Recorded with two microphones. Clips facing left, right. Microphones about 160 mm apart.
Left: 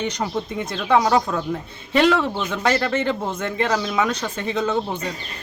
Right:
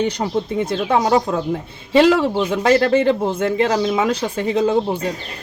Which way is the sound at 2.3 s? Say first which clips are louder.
Right 6 dB; 30° right (ahead or behind).